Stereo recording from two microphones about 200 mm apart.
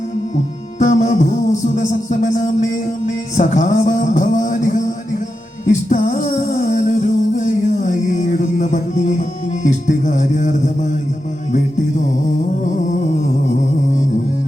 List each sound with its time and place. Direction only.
0.8 s music: 35° left (ahead or behind)
3.3 s speech: 35° left (ahead or behind)
5.6 s a sound: 35° left (ahead or behind)
9.6 s music: 35° left (ahead or behind)
12.6 s music: 40° left (ahead or behind)